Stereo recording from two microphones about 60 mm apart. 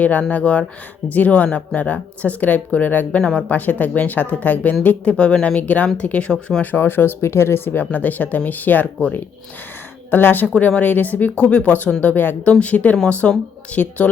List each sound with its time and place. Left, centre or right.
0.0 s speech: left
3.2 s speech: centre
3.5 s speech: left
6.6 s speech: left
10.1 s speech: left
10.4 s speech: left
12.5 s speech: left